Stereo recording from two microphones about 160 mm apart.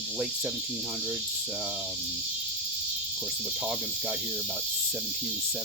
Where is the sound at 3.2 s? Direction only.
5° right (ahead or behind).